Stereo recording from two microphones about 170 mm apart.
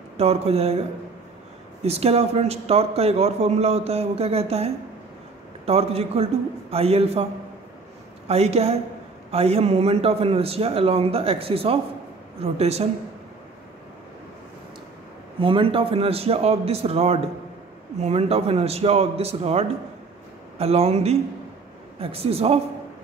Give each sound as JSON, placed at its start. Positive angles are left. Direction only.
{"t": 0.2, "sound": "a man's voice", "side_deg": -35}
{"t": 8.3, "sound": "a man's voice", "side_deg": -35}
{"t": 15.4, "sound": "a man's voice", "side_deg": -30}